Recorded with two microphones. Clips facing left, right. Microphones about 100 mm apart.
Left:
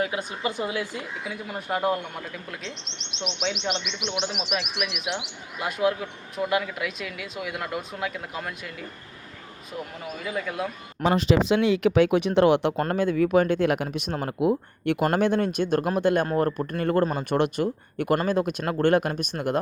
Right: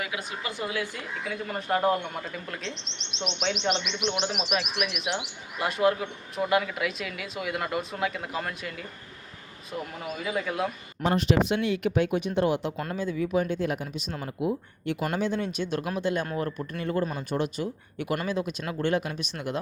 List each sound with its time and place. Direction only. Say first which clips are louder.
0.0 s a woman's voice: left 6 dB; 35° left (ahead or behind)
0.5 s speech: left 3 dB; 20° left (ahead or behind); by 8.7 s centre (ahead or behind)
10.2 s speech: right 1 dB; 5° right (ahead or behind)
11.0 s speech: left 3 dB; 90° left; by 13.8 s 75° left (ahead or behind)
13.9 s speech: left 6 dB; 60° left (ahead or behind)
16.2 s speech: left 7 dB; 40° left (ahead or behind)